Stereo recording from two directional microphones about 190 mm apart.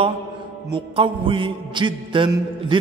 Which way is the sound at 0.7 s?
25° right (ahead or behind).